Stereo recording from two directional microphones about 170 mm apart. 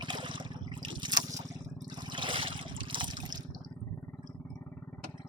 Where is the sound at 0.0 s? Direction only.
25° right (ahead or behind).